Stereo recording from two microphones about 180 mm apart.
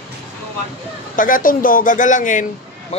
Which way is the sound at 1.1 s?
50° left (ahead or behind).